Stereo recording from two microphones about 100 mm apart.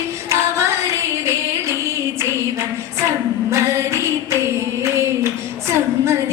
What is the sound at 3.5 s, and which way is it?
Singing, 30° right (ahead or behind).